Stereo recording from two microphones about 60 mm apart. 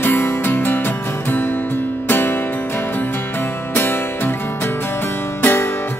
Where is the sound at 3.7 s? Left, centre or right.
Left.